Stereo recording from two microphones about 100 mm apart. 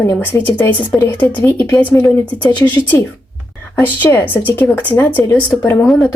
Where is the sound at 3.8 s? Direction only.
20° left (ahead or behind).